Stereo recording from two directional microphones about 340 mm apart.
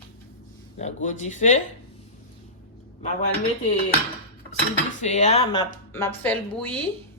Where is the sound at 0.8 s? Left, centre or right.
Left.